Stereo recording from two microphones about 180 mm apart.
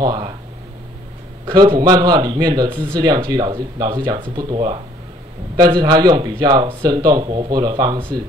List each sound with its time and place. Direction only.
0.0 s speech: 25° right (ahead or behind)
1.4 s speech: 25° right (ahead or behind)